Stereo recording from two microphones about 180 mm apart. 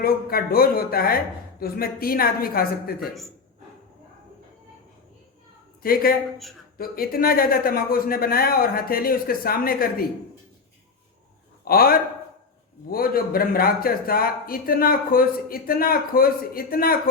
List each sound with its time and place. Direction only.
0.0 s a man's voice: 55° left (ahead or behind)
5.8 s a man's voice: 55° left (ahead or behind)
11.6 s a man's voice: 55° left (ahead or behind)